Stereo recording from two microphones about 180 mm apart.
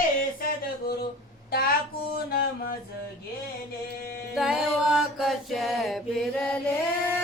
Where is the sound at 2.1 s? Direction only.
55° left (ahead or behind).